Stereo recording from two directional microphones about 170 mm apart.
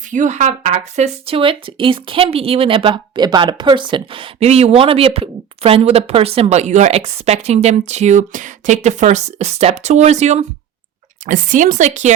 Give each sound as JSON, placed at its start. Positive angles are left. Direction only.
{"t": 0.1, "sound": "speech", "side_deg": -50}